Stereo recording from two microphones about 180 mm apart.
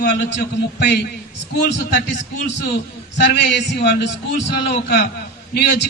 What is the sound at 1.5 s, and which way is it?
A man's voice, 70° left (ahead or behind).